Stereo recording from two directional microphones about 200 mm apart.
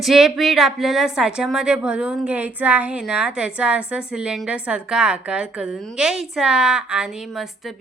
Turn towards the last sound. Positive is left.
turn(degrees=0)  # may be behind; listen again after turning